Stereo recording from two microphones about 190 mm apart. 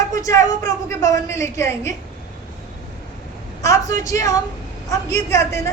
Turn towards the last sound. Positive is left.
turn(degrees=15)  # may be behind; listen again after turning